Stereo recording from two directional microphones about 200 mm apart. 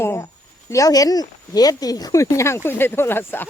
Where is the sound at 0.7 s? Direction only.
15° left (ahead or behind).